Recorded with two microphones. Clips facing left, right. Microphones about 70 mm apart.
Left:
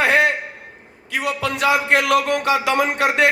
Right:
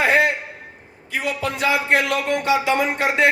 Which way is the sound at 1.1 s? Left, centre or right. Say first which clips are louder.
Left 2 dB; left.